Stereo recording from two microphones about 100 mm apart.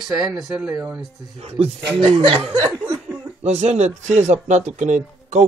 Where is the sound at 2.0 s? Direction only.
65° right (ahead or behind).